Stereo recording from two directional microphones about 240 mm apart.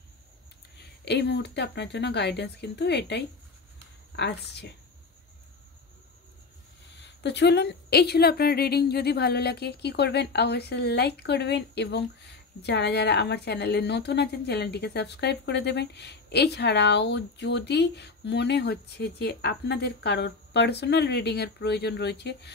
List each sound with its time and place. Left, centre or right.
0.7 s a woman's voice: left
7.0 s a woman's voice: left